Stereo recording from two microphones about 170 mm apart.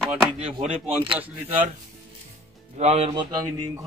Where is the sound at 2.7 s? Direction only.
40° right (ahead or behind).